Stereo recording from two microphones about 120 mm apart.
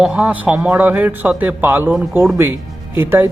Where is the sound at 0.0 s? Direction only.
10° right (ahead or behind).